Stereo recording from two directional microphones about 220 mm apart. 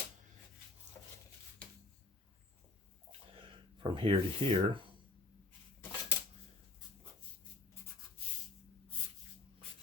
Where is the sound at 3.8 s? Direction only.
25° right (ahead or behind).